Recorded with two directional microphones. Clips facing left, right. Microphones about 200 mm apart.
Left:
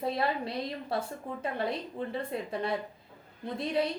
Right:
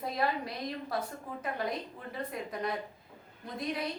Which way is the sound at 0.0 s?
30° left (ahead or behind).